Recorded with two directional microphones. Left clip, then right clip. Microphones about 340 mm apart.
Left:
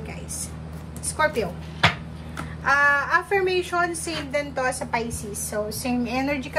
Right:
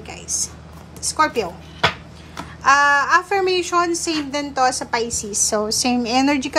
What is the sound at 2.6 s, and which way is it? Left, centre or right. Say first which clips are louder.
A woman's voice: right 5 dB; centre.